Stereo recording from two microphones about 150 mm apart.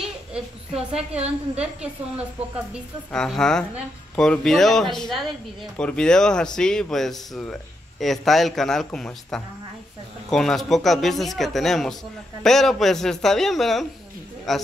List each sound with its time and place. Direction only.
0.9 s a woman's voice: 45° right (ahead or behind)
3.1 s speech: 5° left (ahead or behind)